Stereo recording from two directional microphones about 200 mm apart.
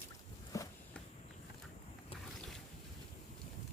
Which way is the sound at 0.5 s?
15° left (ahead or behind).